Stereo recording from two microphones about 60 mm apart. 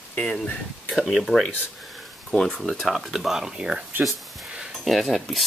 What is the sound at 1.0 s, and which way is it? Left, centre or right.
Speech, centre.